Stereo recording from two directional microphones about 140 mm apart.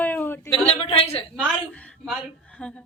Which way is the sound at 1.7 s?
10° left (ahead or behind).